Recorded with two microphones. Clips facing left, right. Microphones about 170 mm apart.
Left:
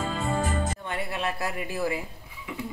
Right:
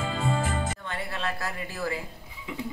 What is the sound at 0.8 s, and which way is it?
Speech, 15° left (ahead or behind).